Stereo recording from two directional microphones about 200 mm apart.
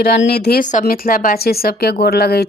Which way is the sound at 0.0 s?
55° left (ahead or behind).